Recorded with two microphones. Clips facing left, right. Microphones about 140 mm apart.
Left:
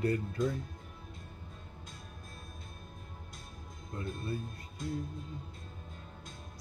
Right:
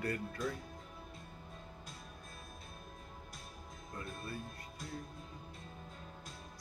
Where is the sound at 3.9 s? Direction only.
25° left (ahead or behind).